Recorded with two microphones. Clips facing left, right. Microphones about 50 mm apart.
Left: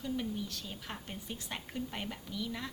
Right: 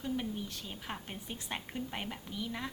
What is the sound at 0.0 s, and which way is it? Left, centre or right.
A woman's voice, right.